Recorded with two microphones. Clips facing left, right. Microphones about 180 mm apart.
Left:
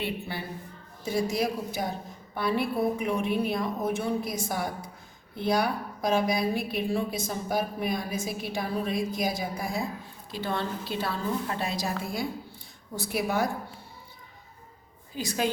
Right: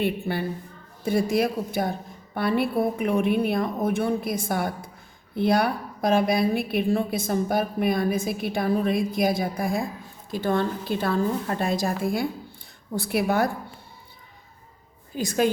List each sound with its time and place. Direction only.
0.0 s a woman's voice: 55° right (ahead or behind)
15.1 s a woman's voice: 50° right (ahead or behind)